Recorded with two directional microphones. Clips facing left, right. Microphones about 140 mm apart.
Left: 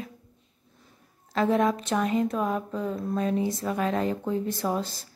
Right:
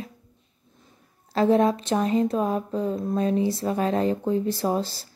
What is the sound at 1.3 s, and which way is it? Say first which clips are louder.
Speech: right 4 dB; 30° right (ahead or behind).